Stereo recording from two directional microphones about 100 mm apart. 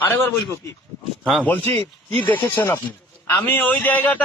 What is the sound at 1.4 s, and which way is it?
Speech, 20° left (ahead or behind).